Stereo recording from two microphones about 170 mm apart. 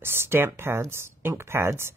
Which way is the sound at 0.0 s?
15° right (ahead or behind).